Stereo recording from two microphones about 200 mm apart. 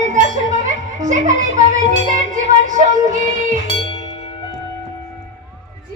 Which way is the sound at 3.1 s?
40° right (ahead or behind).